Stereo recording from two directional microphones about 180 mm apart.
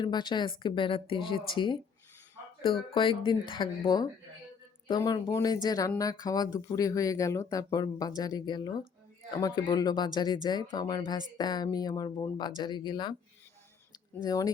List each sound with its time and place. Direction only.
0.0 s speech: 25° left (ahead or behind)
2.9 s speech: 30° left (ahead or behind)
14.2 s speech: 20° left (ahead or behind)